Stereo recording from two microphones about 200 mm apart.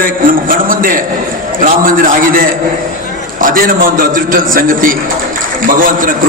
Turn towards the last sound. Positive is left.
turn(degrees=-45)  # may be behind; listen again after turning